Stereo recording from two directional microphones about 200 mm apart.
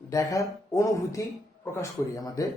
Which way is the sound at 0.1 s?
15° left (ahead or behind).